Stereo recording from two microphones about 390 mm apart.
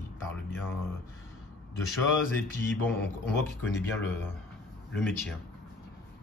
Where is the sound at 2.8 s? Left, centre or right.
Centre.